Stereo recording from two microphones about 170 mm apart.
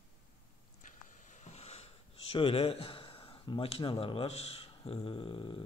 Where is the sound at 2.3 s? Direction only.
30° left (ahead or behind).